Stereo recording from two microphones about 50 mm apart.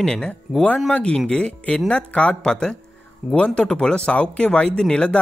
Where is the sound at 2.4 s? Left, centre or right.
Centre.